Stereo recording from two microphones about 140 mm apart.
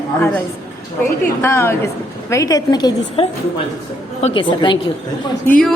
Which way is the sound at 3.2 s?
40° left (ahead or behind).